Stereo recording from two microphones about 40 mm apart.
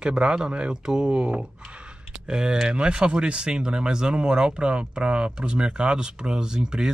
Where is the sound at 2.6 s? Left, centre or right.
Right.